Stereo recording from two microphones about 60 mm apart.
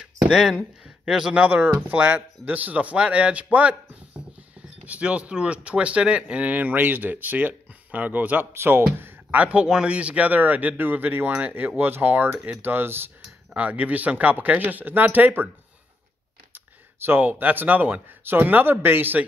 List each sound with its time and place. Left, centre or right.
0.3 s speech: centre
0.8 s a sound: centre
2.0 s speech: right
4.6 s speech: right
8.5 s speech: right
9.0 s speech: right
13.5 s speech: right
16.5 s speech: right